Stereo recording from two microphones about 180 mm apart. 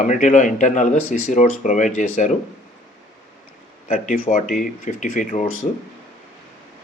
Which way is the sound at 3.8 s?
50° left (ahead or behind).